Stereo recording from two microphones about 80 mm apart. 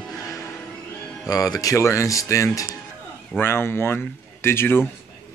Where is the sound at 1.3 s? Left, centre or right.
Left.